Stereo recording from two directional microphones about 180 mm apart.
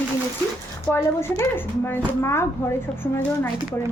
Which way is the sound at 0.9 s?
15° left (ahead or behind).